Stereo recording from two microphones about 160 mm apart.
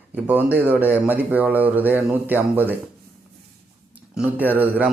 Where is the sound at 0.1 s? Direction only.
10° right (ahead or behind).